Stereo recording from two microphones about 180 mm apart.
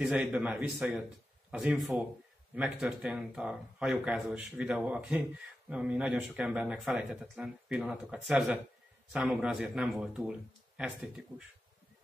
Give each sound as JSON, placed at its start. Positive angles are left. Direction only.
{"t": 0.0, "sound": "a man's voice", "side_deg": -5}